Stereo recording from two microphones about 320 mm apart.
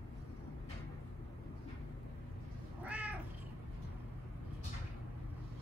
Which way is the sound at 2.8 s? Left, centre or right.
Centre.